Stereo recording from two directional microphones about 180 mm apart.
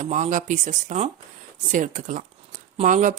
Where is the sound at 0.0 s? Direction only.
45° right (ahead or behind).